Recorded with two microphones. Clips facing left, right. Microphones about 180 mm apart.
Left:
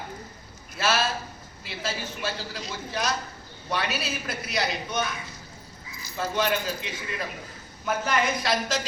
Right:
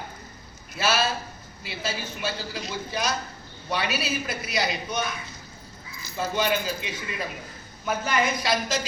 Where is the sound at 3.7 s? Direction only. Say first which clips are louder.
Right 2 dB; centre (ahead or behind).